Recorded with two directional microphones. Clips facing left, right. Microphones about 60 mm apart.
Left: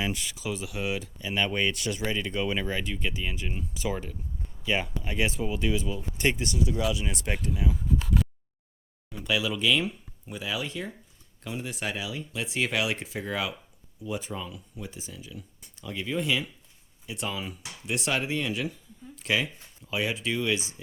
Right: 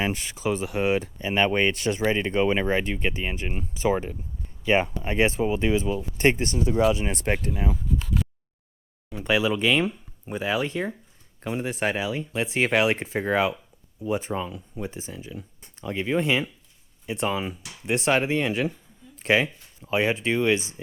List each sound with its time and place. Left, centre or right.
0.0 s speech: right
9.1 s speech: right